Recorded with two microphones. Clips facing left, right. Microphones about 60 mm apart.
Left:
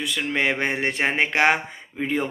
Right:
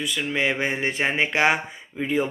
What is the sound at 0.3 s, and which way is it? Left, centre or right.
Speech, left.